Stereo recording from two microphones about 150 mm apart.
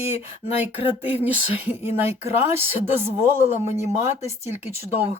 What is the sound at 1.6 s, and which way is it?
Speech, 10° right (ahead or behind).